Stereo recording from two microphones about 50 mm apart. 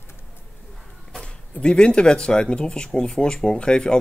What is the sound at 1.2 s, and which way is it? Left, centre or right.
Speech, centre.